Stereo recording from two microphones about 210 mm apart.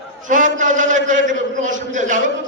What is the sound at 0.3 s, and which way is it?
A man's voice, 40° right (ahead or behind).